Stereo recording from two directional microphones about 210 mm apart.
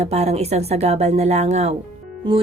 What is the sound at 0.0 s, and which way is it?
A woman's voice, 30° right (ahead or behind).